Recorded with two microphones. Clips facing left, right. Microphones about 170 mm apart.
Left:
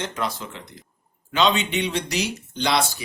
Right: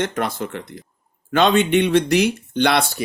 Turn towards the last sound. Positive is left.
turn(degrees=-60)  # may be behind; listen again after turning